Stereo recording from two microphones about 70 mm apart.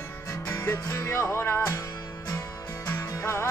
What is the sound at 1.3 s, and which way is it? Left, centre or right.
Music, left.